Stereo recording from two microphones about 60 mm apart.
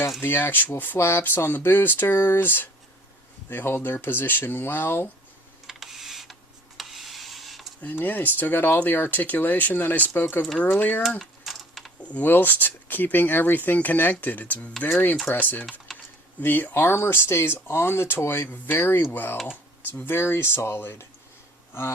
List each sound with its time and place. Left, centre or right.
0.2 s speech: left
5.6 s computer keyboard: centre
6.7 s printer: centre
7.8 s speech: left
11.2 s a sound: centre
12.0 s speech: left
14.8 s speech: left
15.9 s typing: centre
16.4 s speech: left
21.7 s a sound: left